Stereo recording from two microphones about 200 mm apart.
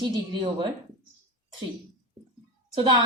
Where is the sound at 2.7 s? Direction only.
25° right (ahead or behind).